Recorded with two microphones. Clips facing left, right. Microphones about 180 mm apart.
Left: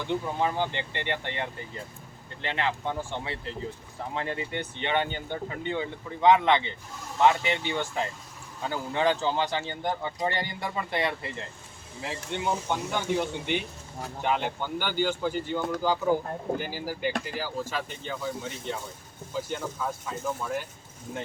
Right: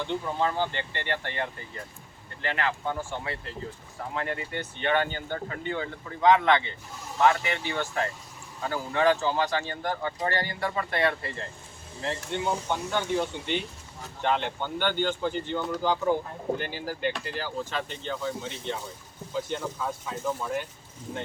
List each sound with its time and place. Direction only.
0.0 s speech: 15° left (ahead or behind)